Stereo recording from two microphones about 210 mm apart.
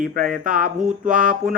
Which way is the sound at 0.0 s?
40° right (ahead or behind).